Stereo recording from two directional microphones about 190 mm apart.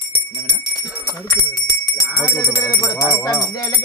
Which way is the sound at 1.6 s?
15° left (ahead or behind).